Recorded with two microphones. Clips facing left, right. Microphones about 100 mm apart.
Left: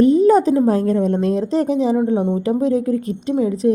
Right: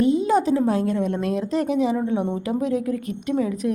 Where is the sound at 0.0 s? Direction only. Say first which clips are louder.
Left 7 dB; 40° left (ahead or behind).